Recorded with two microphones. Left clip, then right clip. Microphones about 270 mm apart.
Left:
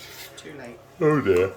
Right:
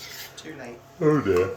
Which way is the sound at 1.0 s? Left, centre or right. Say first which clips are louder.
Left 1 dB; centre.